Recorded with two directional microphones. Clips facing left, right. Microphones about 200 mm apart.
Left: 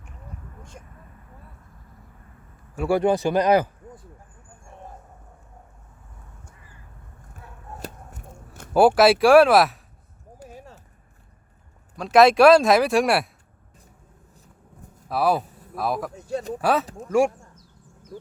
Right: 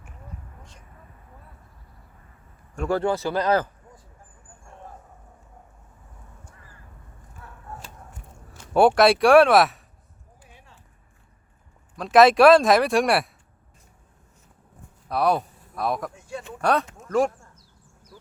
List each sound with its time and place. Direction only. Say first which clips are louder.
2.7 s speech: left 3 dB; 10° left (ahead or behind)
8.1 s a sound: left 4 dB; 50° left (ahead or behind)
9.0 s speech: left 1 dB; centre (ahead or behind)
10.4 s a sound: left 12 dB; 40° left (ahead or behind)
11.9 s speech: even; centre (ahead or behind)
15.1 s speech: even; 5° left (ahead or behind)
16.1 s speech: left 7 dB; 40° left (ahead or behind)
16.6 s speech: right 1 dB; 5° left (ahead or behind)